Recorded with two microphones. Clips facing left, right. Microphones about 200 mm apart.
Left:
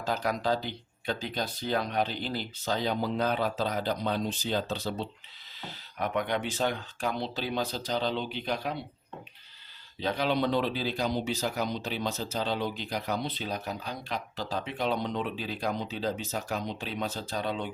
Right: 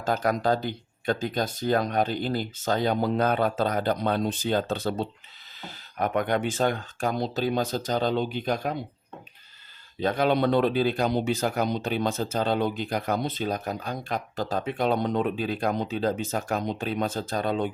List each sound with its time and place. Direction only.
0.0 s speech: 50° right (ahead or behind)
10.0 s speech: 50° right (ahead or behind)